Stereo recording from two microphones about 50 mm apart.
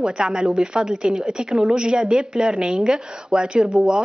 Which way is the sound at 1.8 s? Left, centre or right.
Centre.